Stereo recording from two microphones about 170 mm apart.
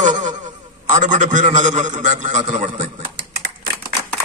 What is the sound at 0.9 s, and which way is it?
A man's voice, 50° right (ahead or behind).